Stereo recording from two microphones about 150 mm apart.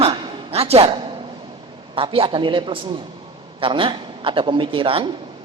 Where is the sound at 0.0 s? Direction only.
40° right (ahead or behind).